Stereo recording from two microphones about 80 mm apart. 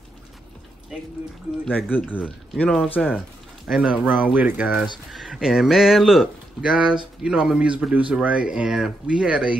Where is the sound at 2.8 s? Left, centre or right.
Left.